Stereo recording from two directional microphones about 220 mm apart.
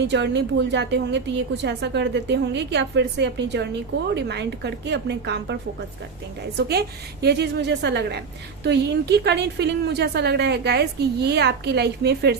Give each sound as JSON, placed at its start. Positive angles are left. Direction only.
{"t": 0.0, "sound": "a woman's voice", "side_deg": -50}
{"t": 6.6, "sound": "a woman's voice", "side_deg": -45}